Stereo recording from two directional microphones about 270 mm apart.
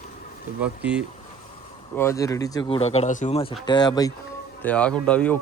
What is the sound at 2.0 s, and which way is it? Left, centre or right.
A man's voice, centre.